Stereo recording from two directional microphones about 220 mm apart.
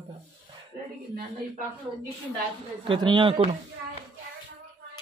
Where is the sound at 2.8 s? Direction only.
20° right (ahead or behind).